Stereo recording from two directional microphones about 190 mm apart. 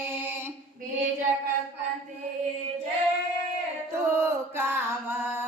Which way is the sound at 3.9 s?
15° right (ahead or behind).